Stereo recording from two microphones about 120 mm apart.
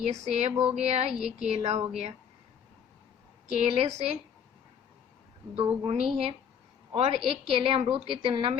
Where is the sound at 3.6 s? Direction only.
60° right (ahead or behind).